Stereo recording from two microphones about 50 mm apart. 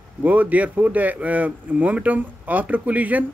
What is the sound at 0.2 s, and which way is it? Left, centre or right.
Speech, right.